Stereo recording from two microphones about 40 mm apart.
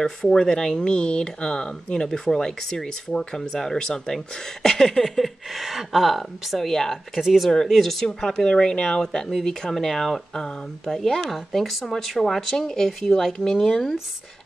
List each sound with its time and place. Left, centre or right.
0.0 s speech: centre
6.7 s speech: centre
7.2 s speech: centre
7.4 s speech: centre